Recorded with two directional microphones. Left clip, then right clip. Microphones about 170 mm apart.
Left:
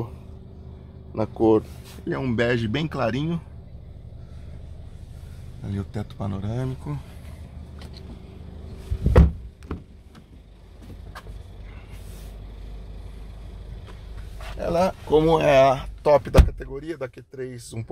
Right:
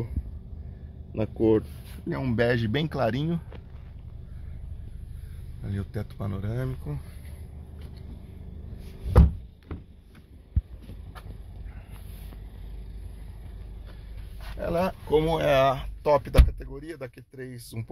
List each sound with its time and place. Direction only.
1.1 s speech: 10° right (ahead or behind)
2.0 s speech: 25° right (ahead or behind)
5.6 s speech: centre (ahead or behind)
9.7 s a sound: 65° left (ahead or behind)
14.6 s speech: 10° right (ahead or behind)
15.0 s speech: 15° left (ahead or behind)